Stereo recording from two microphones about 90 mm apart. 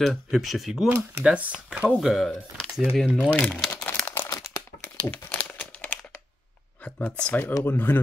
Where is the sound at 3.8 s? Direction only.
15° left (ahead or behind).